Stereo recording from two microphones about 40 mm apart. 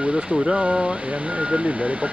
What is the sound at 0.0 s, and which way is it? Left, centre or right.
Speech, right.